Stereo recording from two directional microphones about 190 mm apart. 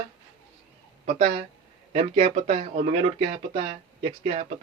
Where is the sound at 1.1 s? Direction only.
35° right (ahead or behind).